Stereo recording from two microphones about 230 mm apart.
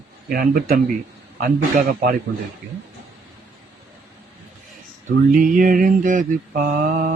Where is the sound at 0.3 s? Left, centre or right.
Right.